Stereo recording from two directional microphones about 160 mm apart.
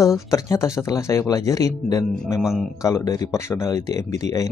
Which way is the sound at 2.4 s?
Centre (ahead or behind).